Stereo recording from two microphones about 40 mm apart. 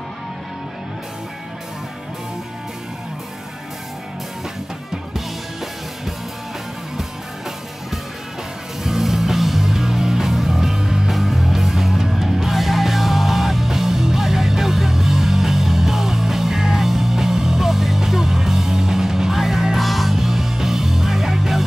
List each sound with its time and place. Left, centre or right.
8.8 s music: centre
11.1 s music: centre